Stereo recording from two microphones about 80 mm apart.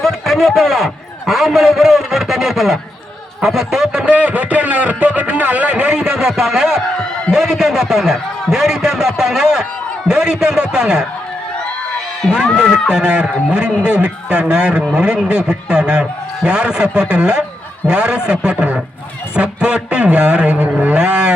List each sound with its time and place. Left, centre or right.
0.0 s a sound: centre
1.3 s a man's voice: centre
12.3 s a man's voice: centre